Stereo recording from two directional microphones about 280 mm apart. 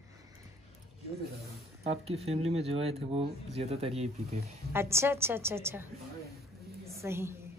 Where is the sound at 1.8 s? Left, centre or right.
Right.